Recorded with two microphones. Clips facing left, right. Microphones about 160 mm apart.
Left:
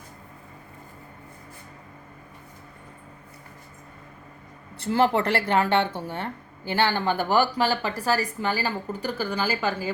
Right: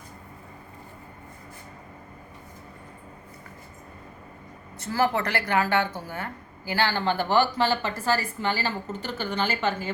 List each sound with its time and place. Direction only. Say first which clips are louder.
4.8 s speech: left 3 dB; 25° left (ahead or behind)